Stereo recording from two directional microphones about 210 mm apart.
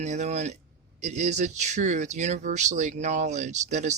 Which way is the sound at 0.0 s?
35° right (ahead or behind).